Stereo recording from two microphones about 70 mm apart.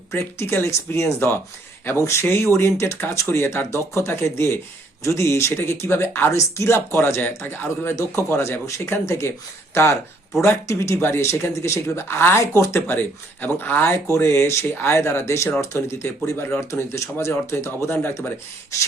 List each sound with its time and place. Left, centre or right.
0.1 s speech: left
7.9 s speech: left
12.9 s speech: left
16.6 s speech: left
18.7 s speech: left